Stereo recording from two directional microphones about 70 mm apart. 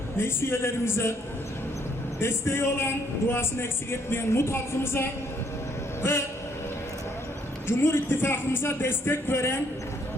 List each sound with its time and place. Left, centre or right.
0.2 s speech: left
2.1 s speech: left
7.7 s speech: left